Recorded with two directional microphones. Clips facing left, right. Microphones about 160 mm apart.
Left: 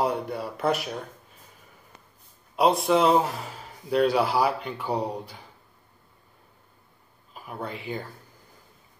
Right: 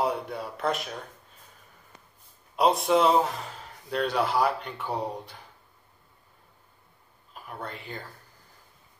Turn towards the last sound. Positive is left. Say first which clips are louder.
# left 5 dB
turn(degrees=5)  # may be behind; listen again after turning